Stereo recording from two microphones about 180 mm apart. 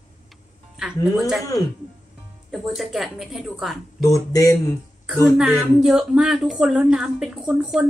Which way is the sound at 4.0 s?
20° left (ahead or behind).